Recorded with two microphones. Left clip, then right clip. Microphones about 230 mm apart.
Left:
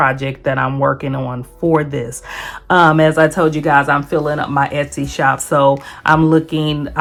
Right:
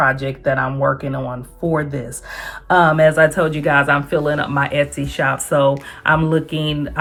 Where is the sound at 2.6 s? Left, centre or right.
Left.